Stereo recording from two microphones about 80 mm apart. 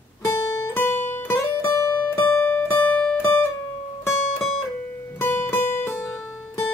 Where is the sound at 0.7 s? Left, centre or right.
Left.